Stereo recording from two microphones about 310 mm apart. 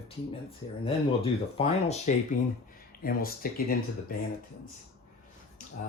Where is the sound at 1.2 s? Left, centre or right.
Centre.